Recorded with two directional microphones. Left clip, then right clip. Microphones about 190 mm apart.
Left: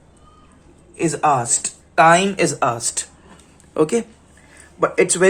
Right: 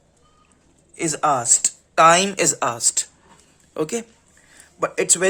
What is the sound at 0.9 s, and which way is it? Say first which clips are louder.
A man's voice: left 3 dB; 50° right (ahead or behind).